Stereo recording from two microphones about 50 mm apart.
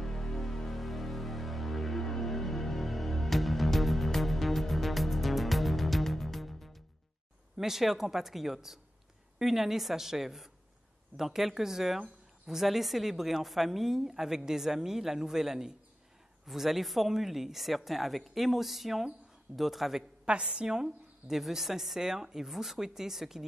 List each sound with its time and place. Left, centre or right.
0.0 s music: centre
7.5 s a woman's voice: centre
20.2 s a woman's voice: centre